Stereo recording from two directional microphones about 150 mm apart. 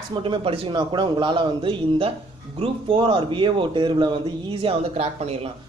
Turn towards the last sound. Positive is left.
turn(degrees=-40)  # may be behind; listen again after turning